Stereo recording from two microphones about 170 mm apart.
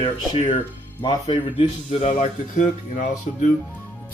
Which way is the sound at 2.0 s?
45° left (ahead or behind).